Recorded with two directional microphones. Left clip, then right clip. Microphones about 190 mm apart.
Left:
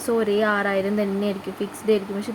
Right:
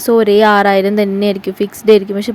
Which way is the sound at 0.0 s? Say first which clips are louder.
Right 12 dB; 35° right (ahead or behind).